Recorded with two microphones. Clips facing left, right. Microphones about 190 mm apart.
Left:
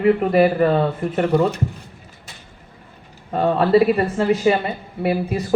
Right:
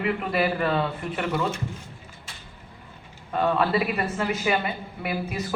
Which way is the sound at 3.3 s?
35° left (ahead or behind).